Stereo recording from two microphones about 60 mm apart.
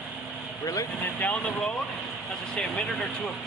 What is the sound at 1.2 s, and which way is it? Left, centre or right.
Speech, left.